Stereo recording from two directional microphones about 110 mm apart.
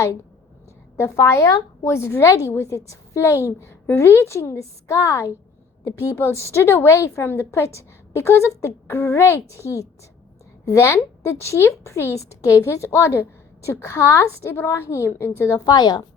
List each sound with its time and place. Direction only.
0.9 s a woman's voice: 25° left (ahead or behind)
15.6 s a woman's voice: 40° left (ahead or behind)